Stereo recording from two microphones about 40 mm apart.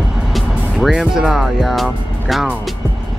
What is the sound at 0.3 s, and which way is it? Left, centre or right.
Speech, centre.